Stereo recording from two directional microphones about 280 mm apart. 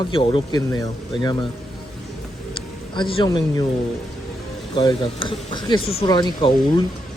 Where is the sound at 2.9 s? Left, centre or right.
Centre.